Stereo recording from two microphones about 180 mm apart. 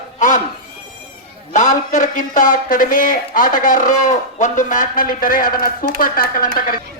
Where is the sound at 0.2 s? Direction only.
45° left (ahead or behind).